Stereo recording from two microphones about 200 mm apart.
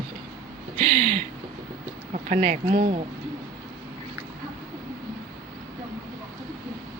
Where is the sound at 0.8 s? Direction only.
35° right (ahead or behind).